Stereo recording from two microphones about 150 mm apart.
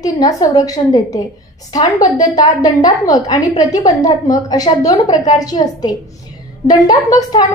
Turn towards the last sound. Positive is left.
turn(degrees=25)  # may be behind; listen again after turning